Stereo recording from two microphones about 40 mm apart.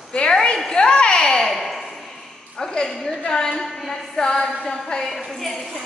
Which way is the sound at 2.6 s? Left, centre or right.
Centre.